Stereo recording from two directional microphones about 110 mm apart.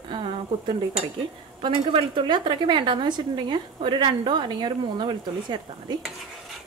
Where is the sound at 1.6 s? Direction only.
45° right (ahead or behind).